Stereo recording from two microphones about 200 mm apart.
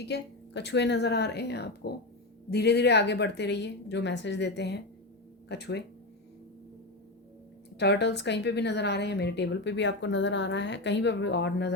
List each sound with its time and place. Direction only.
0.0 s a woman's voice: 60° left (ahead or behind)
7.8 s a woman's voice: 60° left (ahead or behind)